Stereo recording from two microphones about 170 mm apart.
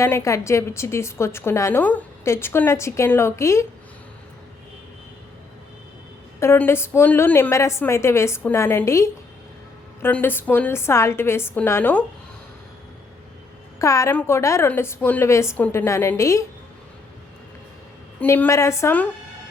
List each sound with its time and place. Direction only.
0.0 s a woman's voice: 15° left (ahead or behind)
6.4 s a woman's voice: 15° left (ahead or behind)
13.7 s a woman's voice: 15° left (ahead or behind)
18.2 s a woman's voice: 10° left (ahead or behind)